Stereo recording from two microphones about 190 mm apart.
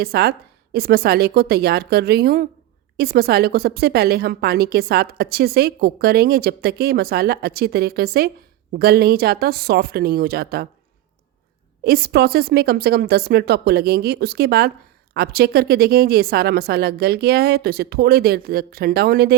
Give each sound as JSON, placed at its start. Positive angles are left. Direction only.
{"t": 0.0, "sound": "a woman's voice", "side_deg": -55}
{"t": 11.8, "sound": "a woman's voice", "side_deg": -55}